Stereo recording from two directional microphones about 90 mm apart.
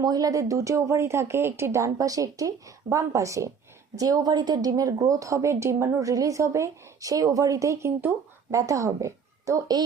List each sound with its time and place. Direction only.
0.0 s a woman's voice: 45° right (ahead or behind)